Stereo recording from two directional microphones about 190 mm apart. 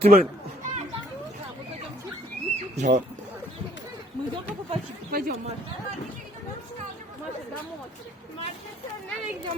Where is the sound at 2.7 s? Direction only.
40° right (ahead or behind).